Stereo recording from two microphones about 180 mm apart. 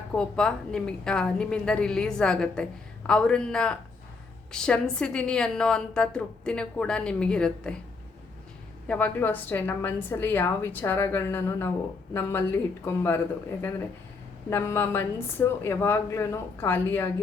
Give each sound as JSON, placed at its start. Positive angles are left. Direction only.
{"t": 0.2, "sound": "a woman's voice", "side_deg": 5}
{"t": 8.9, "sound": "a woman's voice", "side_deg": 10}